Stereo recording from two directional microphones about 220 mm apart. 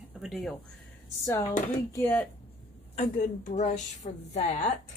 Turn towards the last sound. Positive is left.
turn(degrees=30)  # may be behind; listen again after turning